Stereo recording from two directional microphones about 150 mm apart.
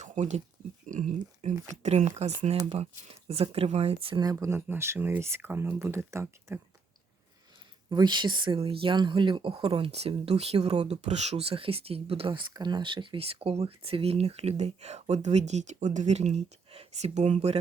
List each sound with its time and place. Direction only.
0.0 s speech: 50° right (ahead or behind); by 6.6 s 15° right (ahead or behind)
7.9 s speech: 30° right (ahead or behind)